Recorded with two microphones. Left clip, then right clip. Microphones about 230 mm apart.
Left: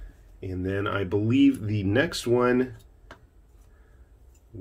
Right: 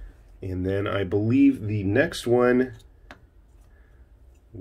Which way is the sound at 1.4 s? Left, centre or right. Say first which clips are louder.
Right 1 dB; centre.